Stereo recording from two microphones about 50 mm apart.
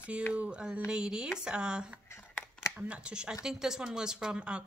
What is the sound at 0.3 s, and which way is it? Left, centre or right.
Speech, right.